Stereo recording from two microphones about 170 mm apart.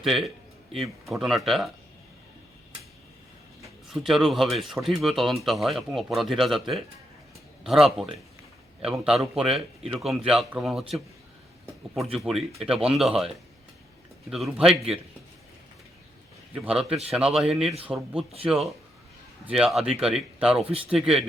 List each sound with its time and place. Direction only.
0.0 s speech: centre (ahead or behind)
3.8 s speech: centre (ahead or behind)
12.1 s speech: centre (ahead or behind)
14.3 s speech: centre (ahead or behind)
16.6 s speech: 5° right (ahead or behind)
20.6 s speech: 35° right (ahead or behind)
21.0 s speech: 5° right (ahead or behind)